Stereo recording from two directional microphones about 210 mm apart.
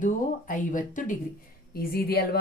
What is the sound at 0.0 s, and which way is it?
A woman's voice, 40° left (ahead or behind).